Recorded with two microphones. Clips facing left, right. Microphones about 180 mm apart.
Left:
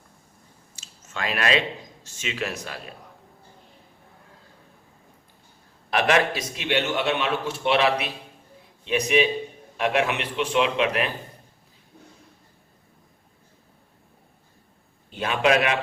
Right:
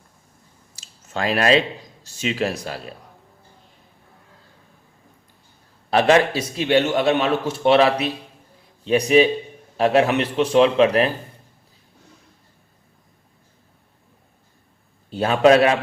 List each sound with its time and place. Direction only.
0.8 s a sound: 35° right (ahead or behind)
2.0 s a man's voice: 35° right (ahead or behind)
5.9 s a man's voice: 30° right (ahead or behind)
15.1 s a man's voice: 35° right (ahead or behind)